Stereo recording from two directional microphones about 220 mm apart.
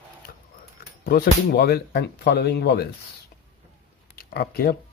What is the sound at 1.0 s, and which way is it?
Speech, 45° left (ahead or behind).